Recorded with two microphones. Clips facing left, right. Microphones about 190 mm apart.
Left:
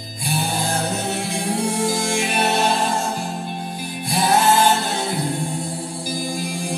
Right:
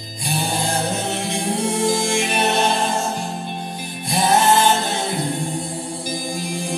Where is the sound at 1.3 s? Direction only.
20° right (ahead or behind).